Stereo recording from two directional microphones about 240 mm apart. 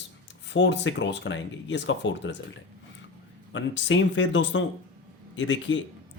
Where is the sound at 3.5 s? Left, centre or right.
Left.